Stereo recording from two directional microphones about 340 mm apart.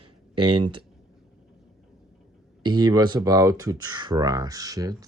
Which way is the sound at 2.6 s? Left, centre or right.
Centre.